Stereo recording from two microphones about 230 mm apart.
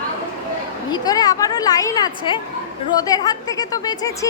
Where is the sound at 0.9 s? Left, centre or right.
Centre.